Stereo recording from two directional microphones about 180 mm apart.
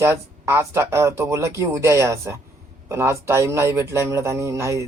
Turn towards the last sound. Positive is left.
turn(degrees=-15)  # may be behind; listen again after turning